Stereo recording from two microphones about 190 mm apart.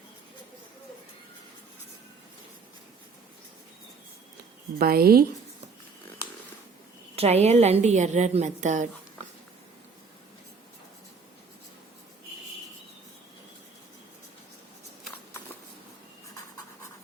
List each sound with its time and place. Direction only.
4.8 s speech: 50° right (ahead or behind)
7.2 s a woman's voice: 35° right (ahead or behind)